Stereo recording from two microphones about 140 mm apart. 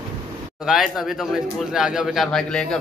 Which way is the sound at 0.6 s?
5° right (ahead or behind).